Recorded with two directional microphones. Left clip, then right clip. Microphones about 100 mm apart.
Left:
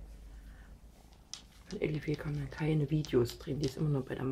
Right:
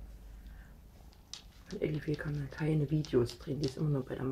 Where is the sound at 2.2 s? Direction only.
Centre (ahead or behind).